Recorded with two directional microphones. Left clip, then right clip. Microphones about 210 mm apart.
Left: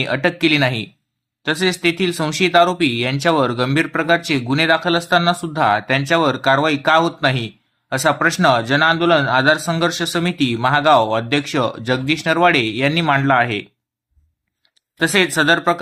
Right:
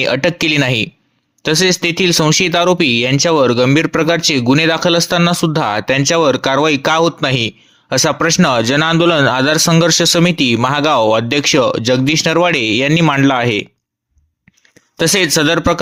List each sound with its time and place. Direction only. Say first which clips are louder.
0.0 s speech: right 4 dB; 45° right (ahead or behind)
14.9 s speech: right 3 dB; 45° right (ahead or behind)